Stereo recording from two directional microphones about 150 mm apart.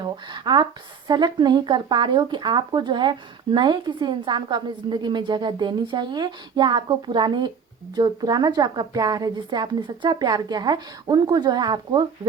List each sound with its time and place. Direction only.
0.0 s a woman's voice: 30° right (ahead or behind)